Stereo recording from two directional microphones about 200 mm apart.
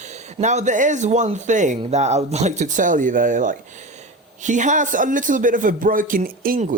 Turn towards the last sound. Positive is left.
turn(degrees=-40)  # may be behind; listen again after turning